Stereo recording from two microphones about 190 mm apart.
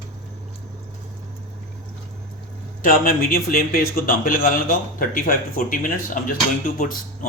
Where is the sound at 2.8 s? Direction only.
50° left (ahead or behind).